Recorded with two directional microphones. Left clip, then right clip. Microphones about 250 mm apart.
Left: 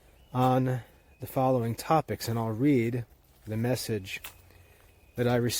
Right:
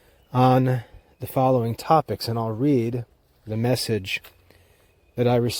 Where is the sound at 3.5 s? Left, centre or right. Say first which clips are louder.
Right 7 dB; right.